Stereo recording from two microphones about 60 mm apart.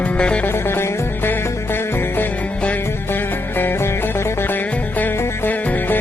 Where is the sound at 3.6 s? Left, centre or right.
Left.